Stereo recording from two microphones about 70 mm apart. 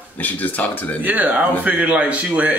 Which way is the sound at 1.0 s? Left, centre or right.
Right.